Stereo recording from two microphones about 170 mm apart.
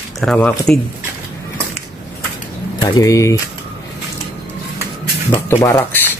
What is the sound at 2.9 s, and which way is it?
Speech, 20° left (ahead or behind).